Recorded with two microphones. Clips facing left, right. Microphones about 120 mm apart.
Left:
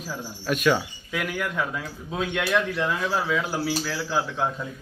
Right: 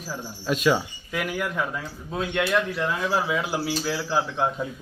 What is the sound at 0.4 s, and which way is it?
Speech, 20° right (ahead or behind).